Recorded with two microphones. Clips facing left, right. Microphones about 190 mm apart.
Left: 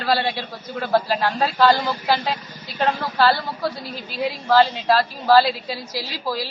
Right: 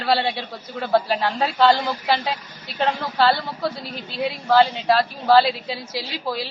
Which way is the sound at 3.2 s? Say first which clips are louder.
Even; 20° right (ahead or behind).